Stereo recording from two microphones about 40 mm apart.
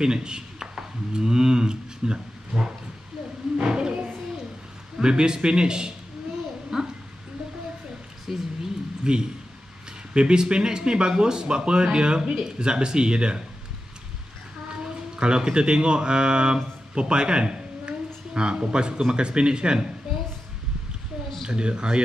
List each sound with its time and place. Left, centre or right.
0.0 s speech: centre
3.5 s roaring cats: right
5.0 s speech: centre
6.7 s dog: centre
8.3 s speech: centre
9.1 s speech: centre
14.7 s speech: right
21.5 s speech: right